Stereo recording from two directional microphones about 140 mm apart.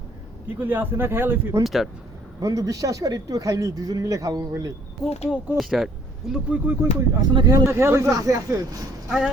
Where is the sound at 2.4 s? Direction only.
25° right (ahead or behind).